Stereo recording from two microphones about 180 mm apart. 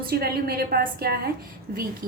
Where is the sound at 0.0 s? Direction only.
60° right (ahead or behind).